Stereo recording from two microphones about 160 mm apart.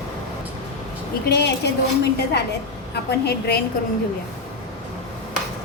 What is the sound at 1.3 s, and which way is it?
Speech, 90° left.